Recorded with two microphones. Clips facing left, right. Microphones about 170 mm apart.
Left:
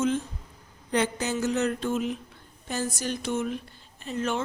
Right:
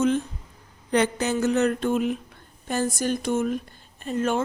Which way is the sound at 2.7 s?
55° right (ahead or behind).